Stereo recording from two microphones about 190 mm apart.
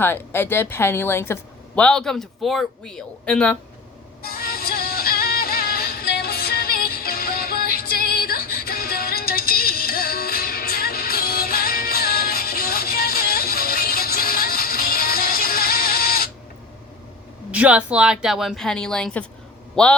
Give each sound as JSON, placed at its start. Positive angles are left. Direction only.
{"t": 0.0, "sound": "a woman's voice", "side_deg": 10}
{"t": 4.2, "sound": "music", "side_deg": 55}
{"t": 17.5, "sound": "a woman's voice", "side_deg": -5}